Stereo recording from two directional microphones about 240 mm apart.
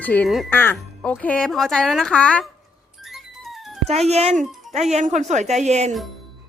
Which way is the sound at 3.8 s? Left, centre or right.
Right.